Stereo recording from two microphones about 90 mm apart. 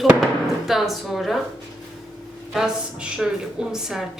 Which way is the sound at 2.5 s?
5° right (ahead or behind).